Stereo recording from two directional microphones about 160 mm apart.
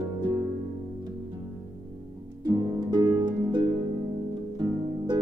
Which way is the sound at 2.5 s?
25° right (ahead or behind).